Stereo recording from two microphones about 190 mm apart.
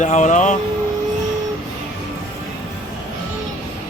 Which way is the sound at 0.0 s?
40° left (ahead or behind).